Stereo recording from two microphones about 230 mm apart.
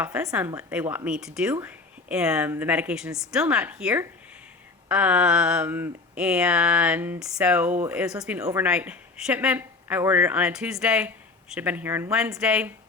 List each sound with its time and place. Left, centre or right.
0.0 s speech: centre